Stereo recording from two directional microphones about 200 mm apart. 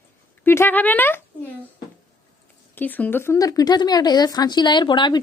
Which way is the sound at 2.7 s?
10° left (ahead or behind).